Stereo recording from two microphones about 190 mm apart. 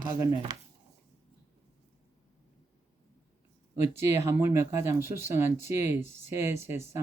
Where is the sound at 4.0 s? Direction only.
15° right (ahead or behind).